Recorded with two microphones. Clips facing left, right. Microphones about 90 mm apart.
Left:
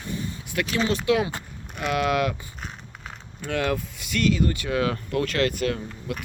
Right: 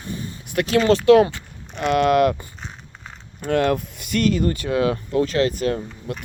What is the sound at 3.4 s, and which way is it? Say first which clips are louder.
Speech: right 6 dB; 45° right (ahead or behind).